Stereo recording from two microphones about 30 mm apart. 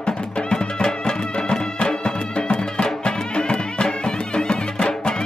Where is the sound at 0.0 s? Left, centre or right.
Left.